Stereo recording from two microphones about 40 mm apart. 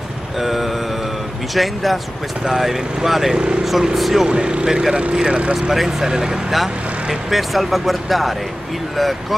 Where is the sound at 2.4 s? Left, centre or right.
Centre.